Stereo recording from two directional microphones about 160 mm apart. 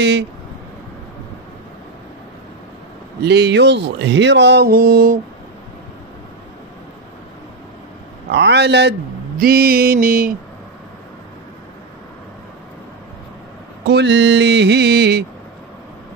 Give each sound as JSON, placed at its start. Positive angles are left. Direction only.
{"t": 3.3, "sound": "speech", "side_deg": -90}
{"t": 8.3, "sound": "speech", "side_deg": -90}
{"t": 9.4, "sound": "mantra", "side_deg": -65}
{"t": 13.8, "sound": "speech", "side_deg": -90}